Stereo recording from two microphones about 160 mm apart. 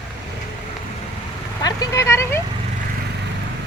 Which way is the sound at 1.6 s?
20° left (ahead or behind).